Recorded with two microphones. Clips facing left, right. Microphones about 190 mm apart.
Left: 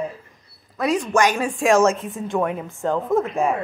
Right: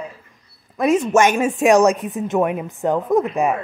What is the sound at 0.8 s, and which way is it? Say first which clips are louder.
Speech: right 4 dB; 25° right (ahead or behind).